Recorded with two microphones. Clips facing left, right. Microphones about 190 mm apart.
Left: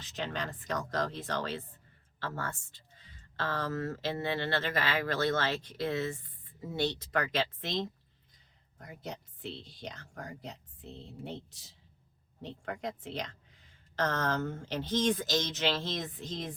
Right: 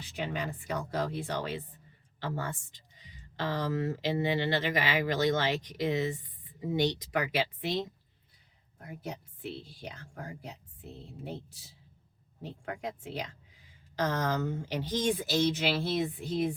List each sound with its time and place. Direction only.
0.0 s speech: 10° right (ahead or behind)